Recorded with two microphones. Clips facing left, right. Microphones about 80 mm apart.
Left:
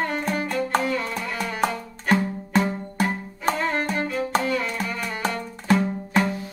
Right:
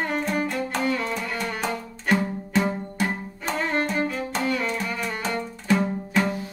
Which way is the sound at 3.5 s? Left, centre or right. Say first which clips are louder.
Even; centre.